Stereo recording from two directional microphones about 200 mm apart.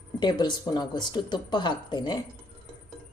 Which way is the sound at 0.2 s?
20° left (ahead or behind).